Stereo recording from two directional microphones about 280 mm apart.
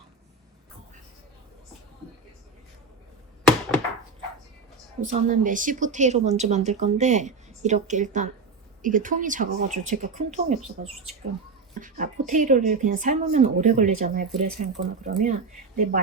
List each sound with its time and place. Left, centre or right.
4.9 s speech: right
11.8 s speech: right